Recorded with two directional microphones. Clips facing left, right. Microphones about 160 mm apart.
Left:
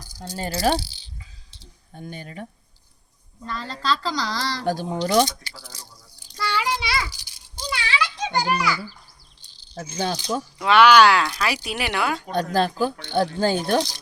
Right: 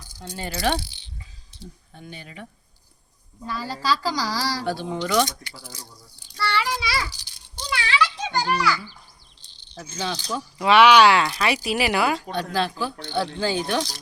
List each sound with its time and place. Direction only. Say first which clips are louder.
0.0 s keys jangling: left 3 dB; 40° left (ahead or behind)
3.4 s a woman's voice: right 1 dB; 10° right (ahead or behind)
4.6 s speech: left 2 dB; 45° left (ahead or behind)
6.3 s child singing: even; 15° left (ahead or behind)
7.1 s a sound: even; 10° left (ahead or behind)
7.7 s children playing: right 2 dB; 20° left (ahead or behind)
10.6 s speech: even; centre (ahead or behind)
12.3 s speech: left 3 dB; 45° left (ahead or behind)